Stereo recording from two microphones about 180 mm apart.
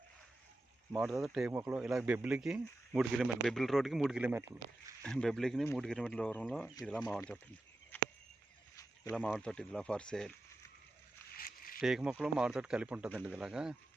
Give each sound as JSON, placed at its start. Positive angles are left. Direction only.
{"t": 1.2, "sound": "speech", "side_deg": 0}
{"t": 5.0, "sound": "speech", "side_deg": 5}
{"t": 7.9, "sound": "a sound", "side_deg": 10}
{"t": 9.4, "sound": "speech", "side_deg": 5}
{"t": 11.3, "sound": "a sound", "side_deg": 55}
{"t": 11.8, "sound": "speech", "side_deg": 0}